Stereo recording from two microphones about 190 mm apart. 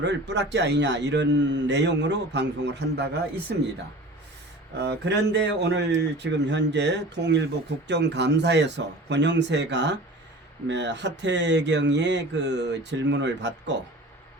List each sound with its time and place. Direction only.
0.0 s a man's voice: 65° right (ahead or behind)
4.8 s a man's voice: 65° right (ahead or behind)